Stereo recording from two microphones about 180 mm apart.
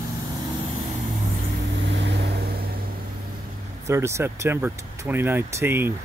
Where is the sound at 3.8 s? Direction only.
15° right (ahead or behind).